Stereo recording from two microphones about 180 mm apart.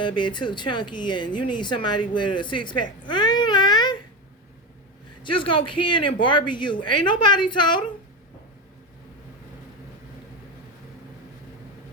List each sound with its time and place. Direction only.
0.0 s speech: 25° left (ahead or behind)
3.1 s baby cry: 25° left (ahead or behind)
5.2 s speech: 30° left (ahead or behind)